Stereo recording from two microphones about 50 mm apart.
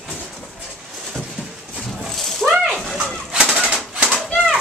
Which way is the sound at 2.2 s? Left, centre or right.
Centre.